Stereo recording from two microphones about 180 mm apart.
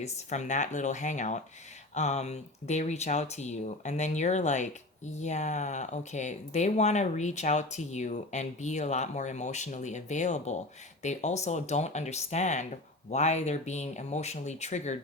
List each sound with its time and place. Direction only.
0.0 s speech: 40° left (ahead or behind)